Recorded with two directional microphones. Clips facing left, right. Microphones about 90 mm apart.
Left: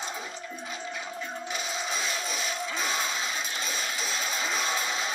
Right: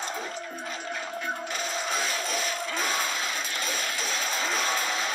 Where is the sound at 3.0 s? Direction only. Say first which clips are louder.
Right 1 dB; 45° right (ahead or behind).